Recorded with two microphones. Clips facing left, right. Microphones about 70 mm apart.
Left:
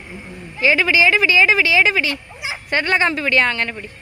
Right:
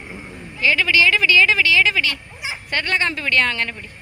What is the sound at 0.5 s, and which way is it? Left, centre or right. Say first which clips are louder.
Speech: left 2 dB; centre.